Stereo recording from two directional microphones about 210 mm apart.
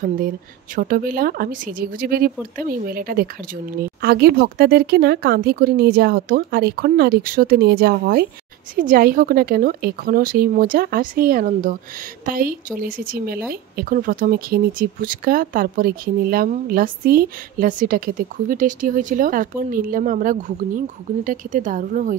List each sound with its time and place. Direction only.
0.7 s speech: 45° right (ahead or behind)